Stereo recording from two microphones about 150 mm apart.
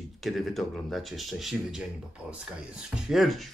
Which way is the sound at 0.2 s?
Centre (ahead or behind).